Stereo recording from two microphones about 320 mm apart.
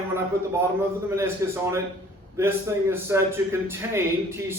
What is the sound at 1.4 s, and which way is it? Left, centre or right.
A man's voice, centre.